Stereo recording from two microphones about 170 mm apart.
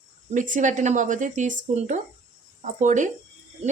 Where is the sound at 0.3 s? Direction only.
50° right (ahead or behind).